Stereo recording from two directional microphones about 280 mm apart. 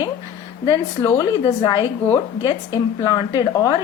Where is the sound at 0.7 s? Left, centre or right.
Centre.